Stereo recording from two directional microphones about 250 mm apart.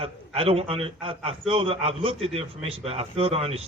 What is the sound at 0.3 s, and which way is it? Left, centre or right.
A man's voice, right.